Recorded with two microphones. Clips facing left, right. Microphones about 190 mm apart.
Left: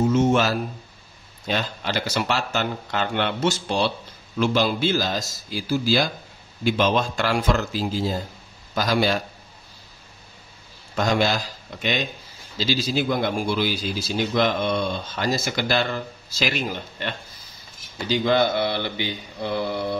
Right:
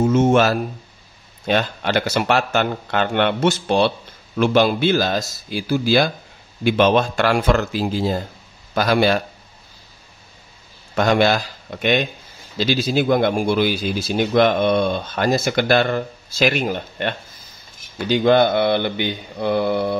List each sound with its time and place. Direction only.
0.1 s a man's voice: 55° right (ahead or behind)
11.0 s a man's voice: 65° right (ahead or behind)